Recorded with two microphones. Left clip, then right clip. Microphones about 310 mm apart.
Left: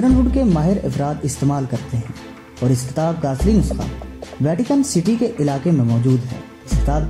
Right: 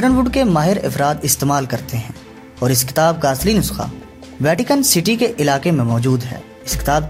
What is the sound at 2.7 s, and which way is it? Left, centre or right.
Speech, right.